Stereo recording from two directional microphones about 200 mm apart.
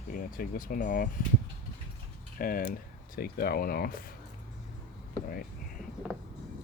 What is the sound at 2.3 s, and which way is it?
Speech, 45° left (ahead or behind).